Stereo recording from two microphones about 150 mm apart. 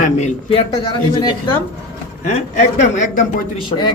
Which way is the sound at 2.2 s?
50° left (ahead or behind).